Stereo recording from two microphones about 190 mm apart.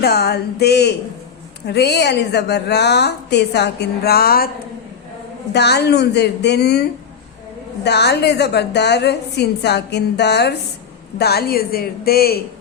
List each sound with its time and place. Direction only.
0.0 s a woman's voice: 60° left (ahead or behind)
5.5 s a woman's voice: 60° left (ahead or behind)
7.9 s a woman's voice: 60° left (ahead or behind)